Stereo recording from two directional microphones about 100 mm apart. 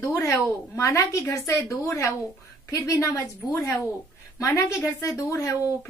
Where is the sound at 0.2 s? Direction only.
30° left (ahead or behind).